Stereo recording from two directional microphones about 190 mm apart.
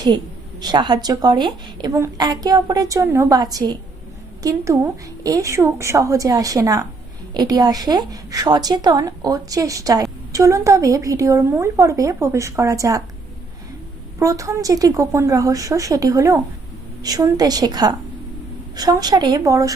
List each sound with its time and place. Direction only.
0.6 s a woman's voice: 20° right (ahead or behind)
14.2 s a woman's voice: 15° right (ahead or behind)